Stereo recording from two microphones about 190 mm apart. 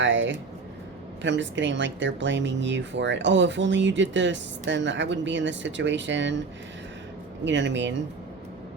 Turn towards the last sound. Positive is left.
turn(degrees=-70)  # may be behind; listen again after turning